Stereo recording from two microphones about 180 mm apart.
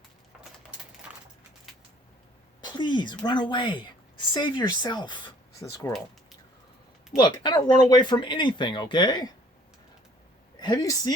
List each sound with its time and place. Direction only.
2.6 s a woman's voice: 25° left (ahead or behind)
7.2 s speech: 25° left (ahead or behind)
10.6 s speech: 20° left (ahead or behind)